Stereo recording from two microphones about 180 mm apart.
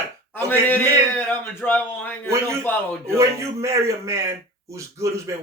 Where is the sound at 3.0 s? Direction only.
15° right (ahead or behind).